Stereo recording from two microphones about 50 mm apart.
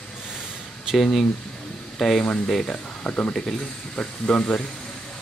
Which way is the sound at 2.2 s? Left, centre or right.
Left.